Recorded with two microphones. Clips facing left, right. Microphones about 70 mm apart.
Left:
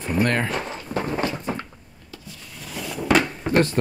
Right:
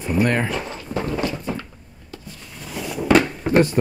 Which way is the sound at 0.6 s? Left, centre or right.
Centre.